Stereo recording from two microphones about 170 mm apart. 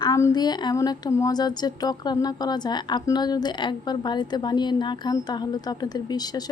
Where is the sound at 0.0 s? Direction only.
20° left (ahead or behind).